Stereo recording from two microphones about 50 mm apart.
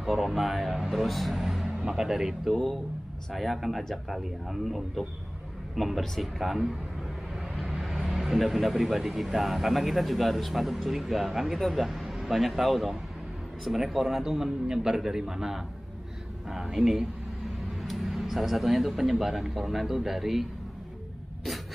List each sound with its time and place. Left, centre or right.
0.0 s speech: centre
1.7 s music: centre
2.0 s a man's voice: centre
2.5 s a man's voice: centre